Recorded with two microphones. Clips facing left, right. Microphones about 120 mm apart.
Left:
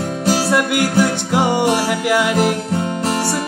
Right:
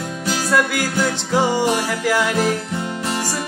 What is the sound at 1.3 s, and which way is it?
Music, 15° left (ahead or behind).